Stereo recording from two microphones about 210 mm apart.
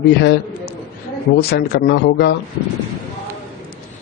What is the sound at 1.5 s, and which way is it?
Speech, 55° left (ahead or behind).